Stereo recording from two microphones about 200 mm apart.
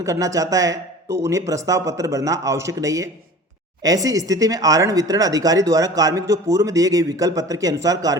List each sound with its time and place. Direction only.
0.0 s speech: 15° right (ahead or behind)